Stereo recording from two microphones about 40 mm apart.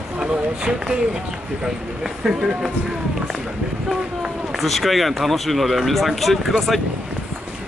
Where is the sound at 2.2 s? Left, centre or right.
Centre.